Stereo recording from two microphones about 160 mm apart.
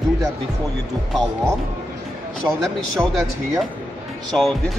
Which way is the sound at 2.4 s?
5° right (ahead or behind).